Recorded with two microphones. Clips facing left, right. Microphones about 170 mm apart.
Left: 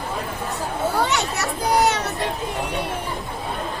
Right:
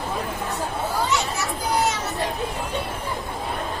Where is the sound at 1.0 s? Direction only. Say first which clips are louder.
Left 1 dB; 70° left (ahead or behind).